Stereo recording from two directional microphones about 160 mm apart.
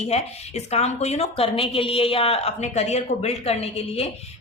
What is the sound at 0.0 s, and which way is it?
A woman's voice, 45° left (ahead or behind).